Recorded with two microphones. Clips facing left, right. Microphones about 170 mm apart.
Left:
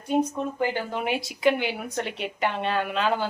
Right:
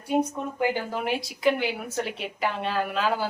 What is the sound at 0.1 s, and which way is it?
A woman's voice, 10° right (ahead or behind).